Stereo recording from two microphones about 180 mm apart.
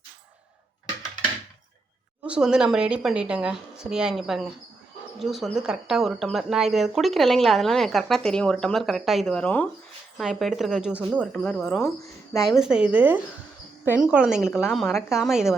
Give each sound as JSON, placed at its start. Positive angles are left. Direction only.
{"t": 2.2, "sound": "speech", "side_deg": -5}
{"t": 11.3, "sound": "speech", "side_deg": 5}
{"t": 12.0, "sound": "speech", "side_deg": 20}
{"t": 12.5, "sound": "speech", "side_deg": -5}